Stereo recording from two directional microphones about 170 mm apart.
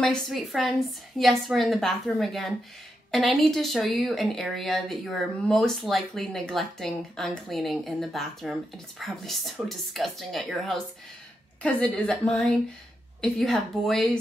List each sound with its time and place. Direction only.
0.0 s speech: centre (ahead or behind)